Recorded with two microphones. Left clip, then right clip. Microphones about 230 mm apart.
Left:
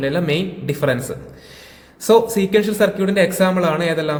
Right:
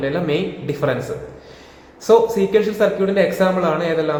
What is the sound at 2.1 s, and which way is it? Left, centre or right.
A man's voice, left.